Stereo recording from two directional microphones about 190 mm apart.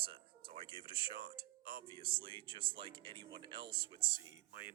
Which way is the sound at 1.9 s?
25° right (ahead or behind).